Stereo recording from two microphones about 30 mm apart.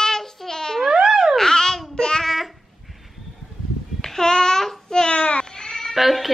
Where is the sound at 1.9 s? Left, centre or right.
Left.